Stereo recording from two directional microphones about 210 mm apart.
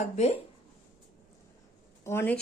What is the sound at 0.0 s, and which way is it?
Speech, 30° left (ahead or behind).